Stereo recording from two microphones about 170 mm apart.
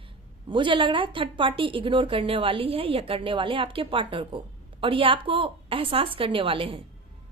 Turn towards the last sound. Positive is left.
turn(degrees=-30)  # may be behind; listen again after turning